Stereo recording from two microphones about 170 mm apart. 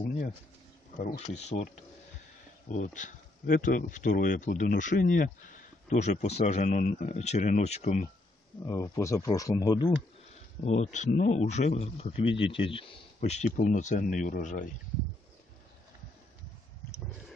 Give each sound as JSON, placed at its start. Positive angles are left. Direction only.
{"t": 1.1, "sound": "speech", "side_deg": 40}
{"t": 8.6, "sound": "speech", "side_deg": 20}
{"t": 10.6, "sound": "speech", "side_deg": 45}